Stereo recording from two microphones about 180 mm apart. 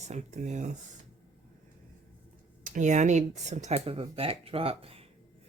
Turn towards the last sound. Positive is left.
turn(degrees=-35)  # may be behind; listen again after turning